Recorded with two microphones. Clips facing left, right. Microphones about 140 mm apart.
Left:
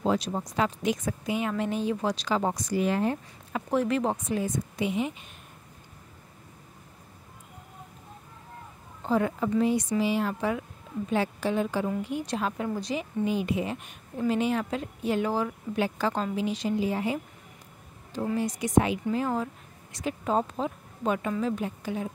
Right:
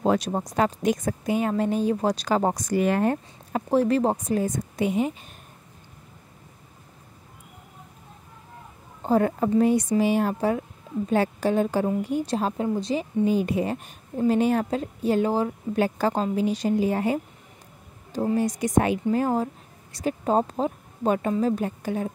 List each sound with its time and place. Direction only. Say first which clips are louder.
0.0 s speech: right 4 dB; 50° right (ahead or behind)
2.7 s speech: right 4 dB; 60° right (ahead or behind)
3.5 s a woman's voice: right 5 dB; 35° right (ahead or behind)
9.0 s a woman's voice: right 4 dB; 45° right (ahead or behind)